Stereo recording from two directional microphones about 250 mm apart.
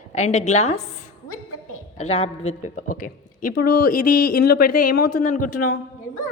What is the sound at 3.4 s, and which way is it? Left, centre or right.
Speech, left.